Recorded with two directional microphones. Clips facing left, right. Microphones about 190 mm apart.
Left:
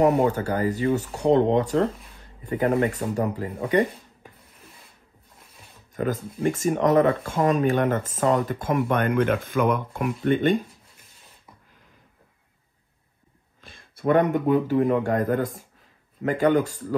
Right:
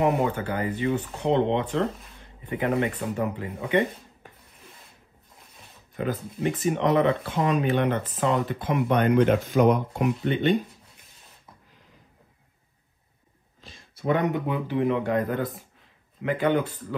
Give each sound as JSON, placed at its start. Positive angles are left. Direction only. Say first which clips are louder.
{"t": 0.0, "sound": "speech", "louder": "left 4 dB", "side_deg": 40}
{"t": 5.9, "sound": "speech", "louder": "left 2 dB", "side_deg": 45}
{"t": 13.6, "sound": "speech", "louder": "left 1 dB", "side_deg": 55}